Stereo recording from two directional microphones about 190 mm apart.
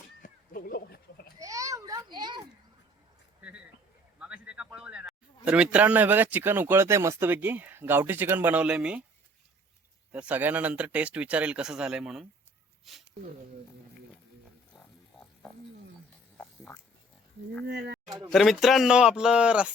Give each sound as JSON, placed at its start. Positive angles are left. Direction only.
{"t": 0.2, "sound": "cat", "side_deg": 50}
{"t": 1.4, "sound": "a sound", "side_deg": -15}
{"t": 3.4, "sound": "a man's voice", "side_deg": -5}
{"t": 10.1, "sound": "a man's voice", "side_deg": -10}
{"t": 16.4, "sound": "music", "side_deg": 10}
{"t": 17.7, "sound": "speech", "side_deg": -60}
{"t": 18.3, "sound": "speech", "side_deg": 0}